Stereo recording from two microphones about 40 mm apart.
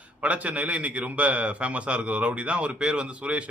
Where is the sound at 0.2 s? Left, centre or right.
Right.